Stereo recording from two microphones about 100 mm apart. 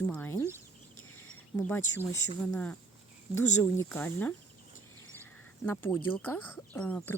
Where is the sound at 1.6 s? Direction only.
20° left (ahead or behind).